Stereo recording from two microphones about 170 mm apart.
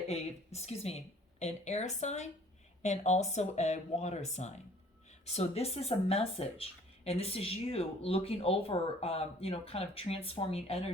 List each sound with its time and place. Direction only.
0.1 s speech: 40° left (ahead or behind)